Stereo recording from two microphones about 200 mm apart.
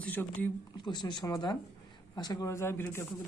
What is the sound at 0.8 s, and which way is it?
Speech, 20° left (ahead or behind).